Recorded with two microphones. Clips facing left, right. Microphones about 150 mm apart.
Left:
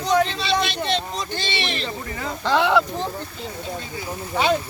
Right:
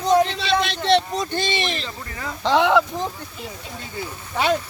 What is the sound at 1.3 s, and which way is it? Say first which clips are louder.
Speech: right 2 dB; 45° right (ahead or behind).